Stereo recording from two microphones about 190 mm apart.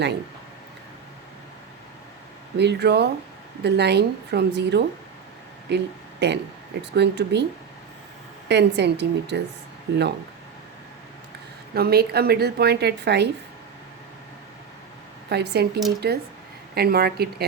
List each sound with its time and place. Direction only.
2.6 s a woman's voice: 60° right (ahead or behind)
8.4 s a woman's voice: 65° right (ahead or behind)
11.7 s a woman's voice: 55° right (ahead or behind)
15.3 s a woman's voice: 60° right (ahead or behind)